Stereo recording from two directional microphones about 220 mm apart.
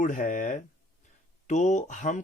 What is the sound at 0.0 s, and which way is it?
Speech, 35° left (ahead or behind).